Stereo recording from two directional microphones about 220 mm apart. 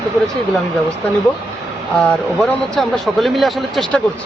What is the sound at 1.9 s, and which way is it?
Speech, 5° left (ahead or behind).